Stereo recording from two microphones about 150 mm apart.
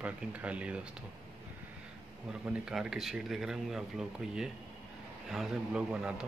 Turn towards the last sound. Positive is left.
turn(degrees=-5)  # may be behind; listen again after turning